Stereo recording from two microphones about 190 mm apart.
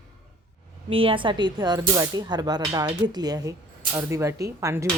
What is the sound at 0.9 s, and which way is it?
Speech, 30° right (ahead or behind).